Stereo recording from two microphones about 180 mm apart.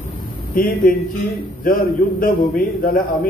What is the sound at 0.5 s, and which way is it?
A man's voice, 50° left (ahead or behind).